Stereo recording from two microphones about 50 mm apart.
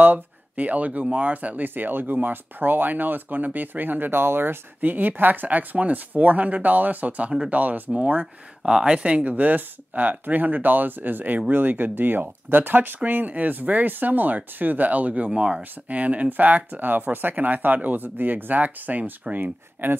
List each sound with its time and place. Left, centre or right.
0.0 s speech: right
1.7 s speech: right; by 9.2 s centre
9.2 s speech: right